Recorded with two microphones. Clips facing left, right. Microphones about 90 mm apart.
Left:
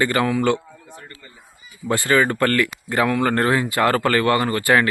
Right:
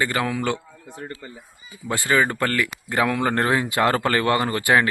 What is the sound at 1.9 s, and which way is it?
Speech, 10° right (ahead or behind).